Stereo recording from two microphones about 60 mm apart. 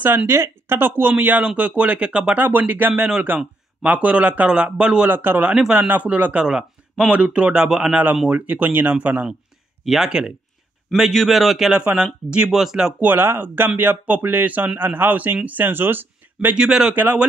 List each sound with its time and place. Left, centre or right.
0.3 s speech: right; by 2.2 s centre
2.3 s speech: right
3.2 s speech: centre
5.1 s speech: right
6.4 s speech: centre
8.3 s speech: right
9.8 s speech: centre
11.8 s speech: right
12.4 s speech: centre
13.2 s speech: right
16.5 s speech: centre
16.9 s speech: right